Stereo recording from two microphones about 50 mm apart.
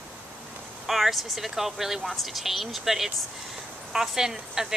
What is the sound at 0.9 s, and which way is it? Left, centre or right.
Speech, centre.